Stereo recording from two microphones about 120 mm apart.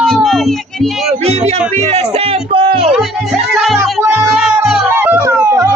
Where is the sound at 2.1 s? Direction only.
55° right (ahead or behind).